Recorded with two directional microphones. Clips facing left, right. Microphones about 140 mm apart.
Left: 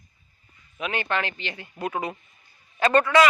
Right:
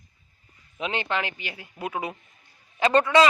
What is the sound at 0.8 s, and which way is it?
A man's voice, 20° right (ahead or behind).